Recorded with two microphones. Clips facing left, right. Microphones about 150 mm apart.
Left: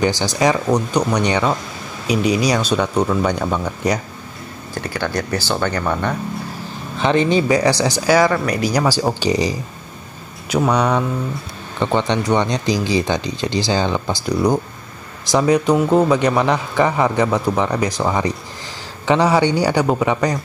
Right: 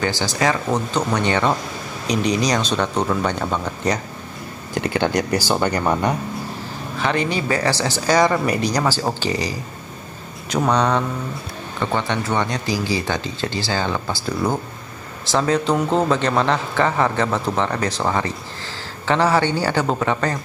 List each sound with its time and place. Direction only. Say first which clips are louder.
0.0 s speech: left 4 dB; 20° left (ahead or behind)
4.7 s speech: right 3 dB; 20° right (ahead or behind)
7.0 s speech: left 6 dB; 20° left (ahead or behind)
8.2 s speech: left 1 dB; centre (ahead or behind); by 9.6 s 20° left (ahead or behind)
10.5 s speech: left 2 dB; 10° left (ahead or behind)